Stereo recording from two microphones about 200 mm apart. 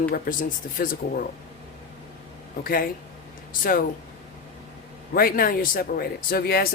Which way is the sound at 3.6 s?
45° left (ahead or behind).